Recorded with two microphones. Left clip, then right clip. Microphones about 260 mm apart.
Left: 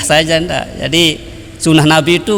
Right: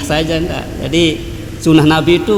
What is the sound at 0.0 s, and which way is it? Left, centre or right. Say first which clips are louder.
A man's voice: left 5 dB; left.